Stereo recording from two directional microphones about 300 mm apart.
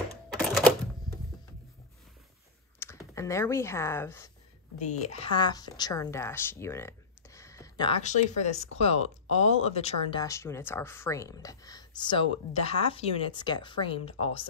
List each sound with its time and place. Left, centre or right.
0.3 s typewriter: centre
2.8 s speech: centre
4.7 s a woman's voice: left
8.0 s speech: left